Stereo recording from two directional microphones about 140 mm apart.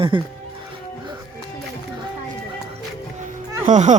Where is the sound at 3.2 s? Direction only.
60° right (ahead or behind).